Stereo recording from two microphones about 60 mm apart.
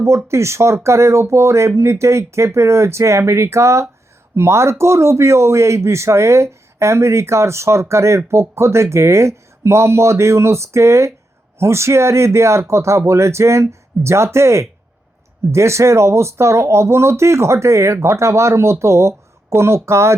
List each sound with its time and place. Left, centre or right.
0.2 s a man's voice: right